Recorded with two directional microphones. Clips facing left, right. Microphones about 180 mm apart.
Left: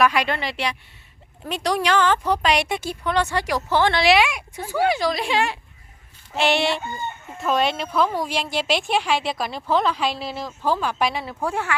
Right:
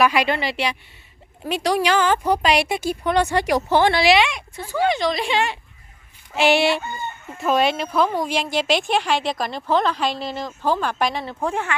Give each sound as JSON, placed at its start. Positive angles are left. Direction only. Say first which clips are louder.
{"t": 0.0, "sound": "a woman's voice", "louder": "right 2 dB", "side_deg": -5}
{"t": 4.0, "sound": "a woman's voice", "louder": "right 1 dB", "side_deg": 5}
{"t": 11.4, "sound": "a woman's voice", "louder": "right 1 dB", "side_deg": -15}